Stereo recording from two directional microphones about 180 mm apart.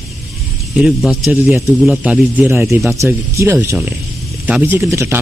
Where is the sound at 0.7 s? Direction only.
Centre (ahead or behind).